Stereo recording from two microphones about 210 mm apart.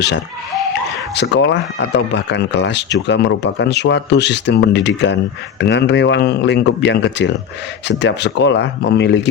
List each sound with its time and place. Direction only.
1.1 s speech: 55° left (ahead or behind)